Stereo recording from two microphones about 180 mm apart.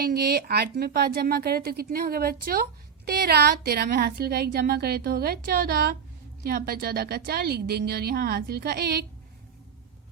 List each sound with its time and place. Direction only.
0.0 s a woman's voice: 60° right (ahead or behind)